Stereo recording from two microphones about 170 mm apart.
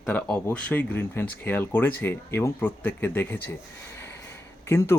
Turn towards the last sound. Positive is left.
turn(degrees=15)  # may be behind; listen again after turning